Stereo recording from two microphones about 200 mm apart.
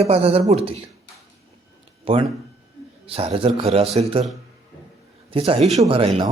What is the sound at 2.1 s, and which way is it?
Speech, 25° right (ahead or behind).